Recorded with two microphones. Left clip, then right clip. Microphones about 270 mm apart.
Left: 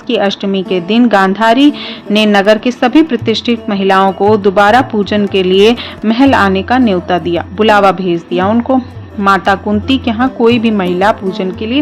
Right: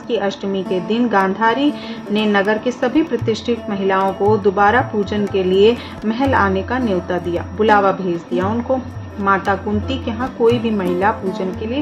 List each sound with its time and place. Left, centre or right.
0.1 s speech: left